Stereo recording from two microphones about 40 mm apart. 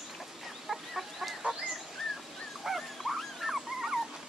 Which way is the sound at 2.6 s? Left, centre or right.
Centre.